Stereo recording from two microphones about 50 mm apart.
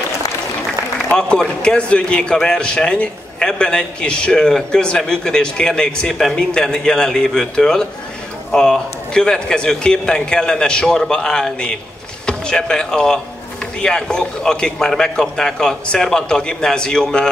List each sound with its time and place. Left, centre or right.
1.6 s a man's voice: left